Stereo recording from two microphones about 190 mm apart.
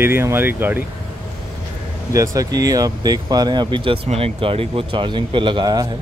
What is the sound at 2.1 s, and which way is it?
Speech, 20° right (ahead or behind).